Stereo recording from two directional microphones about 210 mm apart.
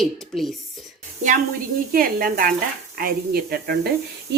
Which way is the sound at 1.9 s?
45° right (ahead or behind).